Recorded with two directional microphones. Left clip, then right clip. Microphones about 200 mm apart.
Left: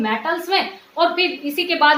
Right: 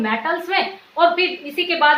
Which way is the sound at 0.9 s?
25° left (ahead or behind).